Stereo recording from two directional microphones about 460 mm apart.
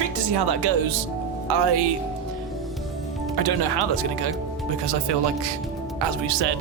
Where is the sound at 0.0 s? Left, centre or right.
Right.